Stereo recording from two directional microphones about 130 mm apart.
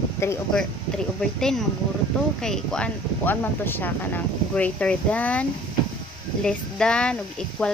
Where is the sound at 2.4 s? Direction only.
5° left (ahead or behind).